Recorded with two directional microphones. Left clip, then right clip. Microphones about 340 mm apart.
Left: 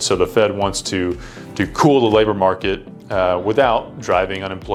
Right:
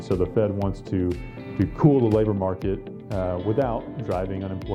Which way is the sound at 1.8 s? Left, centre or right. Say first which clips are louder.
Left 6 dB; left.